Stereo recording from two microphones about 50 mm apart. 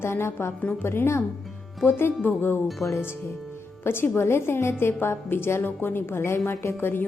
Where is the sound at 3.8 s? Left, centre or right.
Left.